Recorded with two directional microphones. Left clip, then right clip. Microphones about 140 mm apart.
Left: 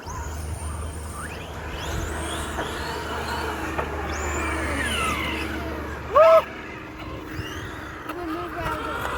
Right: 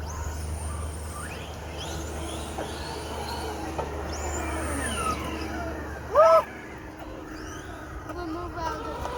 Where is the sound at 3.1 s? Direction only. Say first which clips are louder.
Left 5 dB; 25° left (ahead or behind).